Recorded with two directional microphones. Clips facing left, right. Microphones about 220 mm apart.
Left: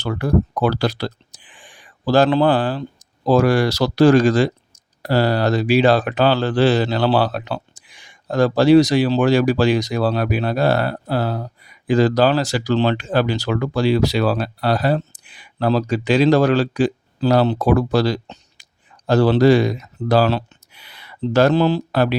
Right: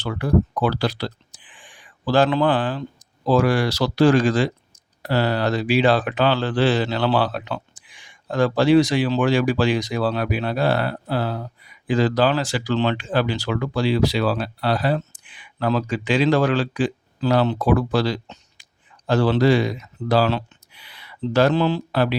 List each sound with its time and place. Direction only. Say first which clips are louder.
0.0 s speech: left 1 dB; 40° left (ahead or behind)